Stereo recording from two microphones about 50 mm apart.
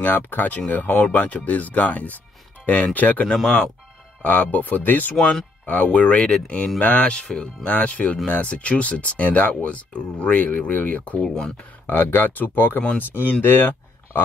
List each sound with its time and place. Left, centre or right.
0.0 s speech: left
11.2 s speech: centre
11.8 s speech: left